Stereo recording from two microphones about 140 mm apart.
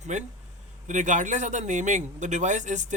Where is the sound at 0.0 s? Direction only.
60° right (ahead or behind).